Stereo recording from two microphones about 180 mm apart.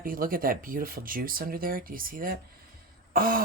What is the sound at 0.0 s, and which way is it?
Speech, 50° right (ahead or behind).